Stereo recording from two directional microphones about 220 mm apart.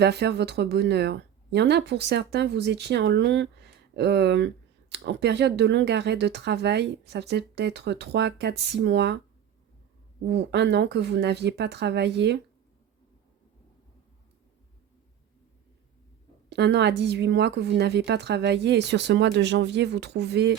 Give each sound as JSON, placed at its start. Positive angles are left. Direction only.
{"t": 0.0, "sound": "speech", "side_deg": -50}
{"t": 10.2, "sound": "speech", "side_deg": -50}
{"t": 16.5, "sound": "speech", "side_deg": -50}